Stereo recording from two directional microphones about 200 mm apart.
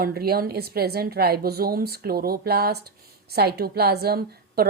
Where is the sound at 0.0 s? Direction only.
50° right (ahead or behind).